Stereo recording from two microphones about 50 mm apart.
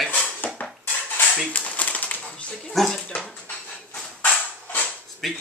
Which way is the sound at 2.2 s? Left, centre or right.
Left.